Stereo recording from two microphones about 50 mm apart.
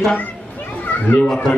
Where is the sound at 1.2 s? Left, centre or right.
Centre.